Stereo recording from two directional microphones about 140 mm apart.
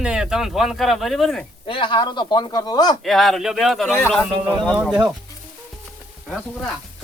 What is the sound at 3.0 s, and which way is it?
Speech, centre (ahead or behind).